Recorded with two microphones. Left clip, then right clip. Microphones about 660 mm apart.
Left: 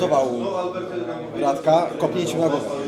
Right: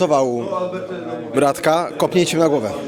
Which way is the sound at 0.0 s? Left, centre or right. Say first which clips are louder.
Right 3 dB; right.